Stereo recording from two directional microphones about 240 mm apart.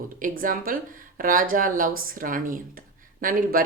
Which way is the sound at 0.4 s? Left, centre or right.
Right.